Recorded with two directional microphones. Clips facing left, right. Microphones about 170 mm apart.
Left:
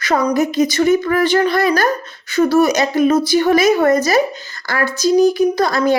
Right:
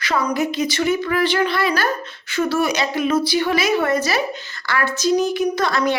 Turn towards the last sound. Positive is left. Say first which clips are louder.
# left 4 dB
turn(degrees=35)  # may be behind; listen again after turning